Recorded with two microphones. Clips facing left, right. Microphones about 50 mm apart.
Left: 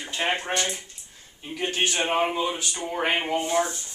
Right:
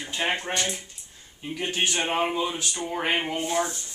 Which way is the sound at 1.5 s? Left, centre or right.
Centre.